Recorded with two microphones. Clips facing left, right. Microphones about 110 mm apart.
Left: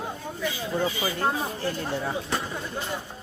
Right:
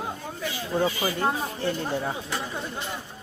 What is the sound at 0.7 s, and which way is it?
Speech, 20° right (ahead or behind).